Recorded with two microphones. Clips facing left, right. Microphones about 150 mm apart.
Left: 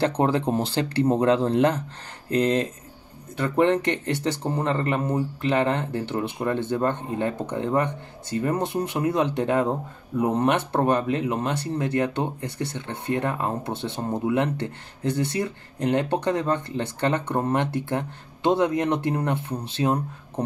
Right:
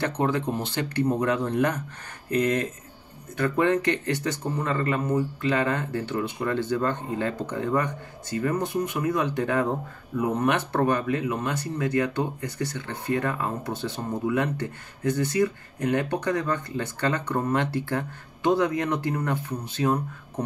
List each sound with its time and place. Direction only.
0.0 s speech: 30° left (ahead or behind)
4.7 s speech: 25° left (ahead or behind)